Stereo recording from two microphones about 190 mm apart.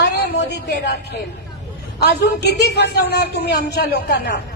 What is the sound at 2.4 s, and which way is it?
A man's voice, 60° left (ahead or behind).